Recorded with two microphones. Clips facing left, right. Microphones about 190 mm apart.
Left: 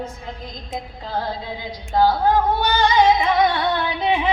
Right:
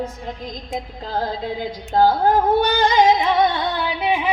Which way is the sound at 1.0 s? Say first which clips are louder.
Right 2 dB; 45° right (ahead or behind).